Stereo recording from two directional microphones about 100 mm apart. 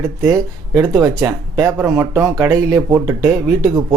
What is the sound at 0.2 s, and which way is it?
Speech, 30° right (ahead or behind).